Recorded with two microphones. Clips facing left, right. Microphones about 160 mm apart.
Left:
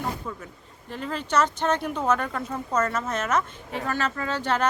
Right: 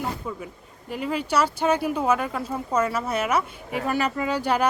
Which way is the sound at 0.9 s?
10° right (ahead or behind).